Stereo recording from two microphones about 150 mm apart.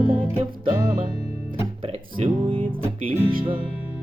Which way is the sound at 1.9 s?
40° right (ahead or behind).